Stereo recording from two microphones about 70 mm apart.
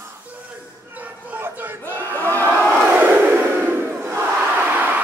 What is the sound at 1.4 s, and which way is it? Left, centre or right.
Battle cry, right.